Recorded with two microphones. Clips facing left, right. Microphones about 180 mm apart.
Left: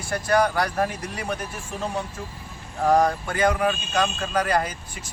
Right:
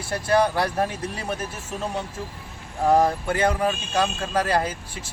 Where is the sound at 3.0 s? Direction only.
25° right (ahead or behind).